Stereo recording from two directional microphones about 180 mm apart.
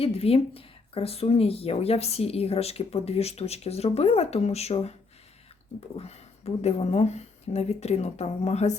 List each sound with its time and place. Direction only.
0.0 s speech: 35° left (ahead or behind)
6.0 s speech: 35° left (ahead or behind)